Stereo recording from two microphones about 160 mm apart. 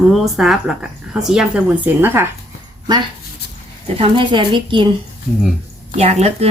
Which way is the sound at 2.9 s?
25° right (ahead or behind).